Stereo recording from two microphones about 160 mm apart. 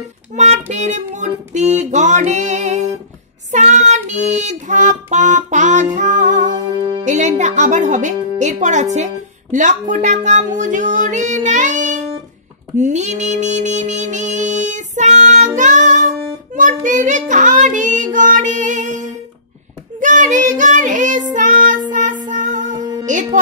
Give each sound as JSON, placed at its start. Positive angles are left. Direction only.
{"t": 0.3, "sound": "child singing", "side_deg": -45}
{"t": 3.5, "sound": "music", "side_deg": -45}
{"t": 6.5, "sound": "music", "side_deg": -25}
{"t": 7.1, "sound": "a woman's voice", "side_deg": -50}
{"t": 12.7, "sound": "music", "side_deg": -50}
{"t": 16.5, "sound": "child singing", "side_deg": -55}
{"t": 23.0, "sound": "speech", "side_deg": -50}